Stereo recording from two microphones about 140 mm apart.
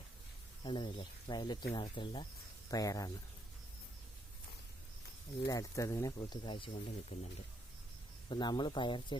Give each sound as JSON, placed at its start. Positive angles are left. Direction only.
{"t": 0.6, "sound": "speech", "side_deg": 35}
{"t": 5.5, "sound": "speech", "side_deg": 25}
{"t": 8.3, "sound": "speech", "side_deg": 35}